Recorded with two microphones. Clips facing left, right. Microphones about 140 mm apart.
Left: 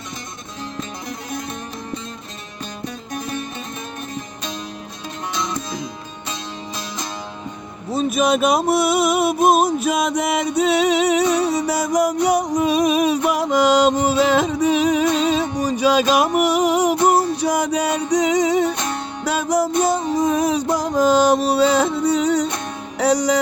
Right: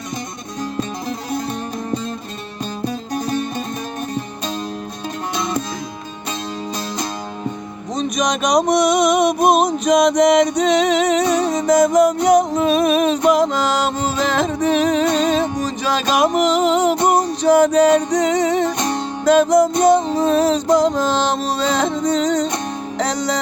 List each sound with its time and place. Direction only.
2.8 s music: 35° right (ahead or behind)
7.9 s a sound: 5° left (ahead or behind)
18.8 s music: 35° right (ahead or behind)
19.2 s music: 10° left (ahead or behind)